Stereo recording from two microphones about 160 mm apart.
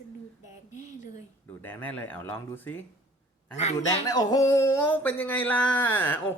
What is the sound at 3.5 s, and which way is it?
Speech, 45° left (ahead or behind).